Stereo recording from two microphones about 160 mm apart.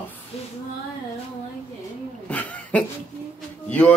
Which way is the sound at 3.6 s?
10° left (ahead or behind).